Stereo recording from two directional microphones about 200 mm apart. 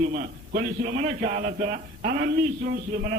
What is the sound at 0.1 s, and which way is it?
A man's voice, 45° right (ahead or behind).